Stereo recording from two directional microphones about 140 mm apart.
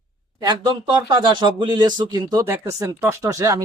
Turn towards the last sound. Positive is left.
turn(degrees=-25)  # may be behind; listen again after turning